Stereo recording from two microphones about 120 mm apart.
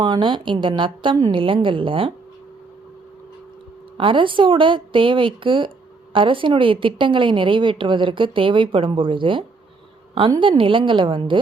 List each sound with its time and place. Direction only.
0.0 s a woman's voice: 40° right (ahead or behind)
3.9 s a woman's voice: 45° right (ahead or behind)
10.4 s a woman's voice: 45° right (ahead or behind)